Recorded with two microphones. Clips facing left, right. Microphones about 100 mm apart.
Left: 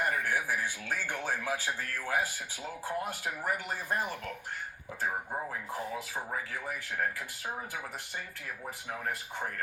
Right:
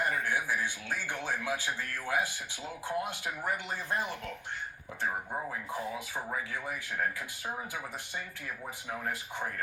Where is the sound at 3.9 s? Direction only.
20° right (ahead or behind).